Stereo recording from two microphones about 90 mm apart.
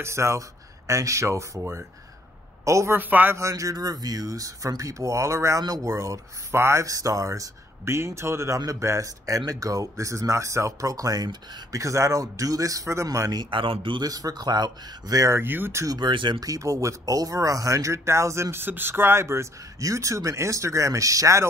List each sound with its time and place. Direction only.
0.0 s speech: 30° right (ahead or behind)
3.0 s speech: 20° right (ahead or behind)
3.3 s speech: 35° right (ahead or behind)
13.4 s speech: 70° right (ahead or behind)
14.0 s speech: 45° right (ahead or behind)
15.3 s speech: 25° right (ahead or behind)
15.8 s speech: 45° right (ahead or behind)
16.1 s speech: 65° right (ahead or behind)
16.3 s speech: 40° right (ahead or behind)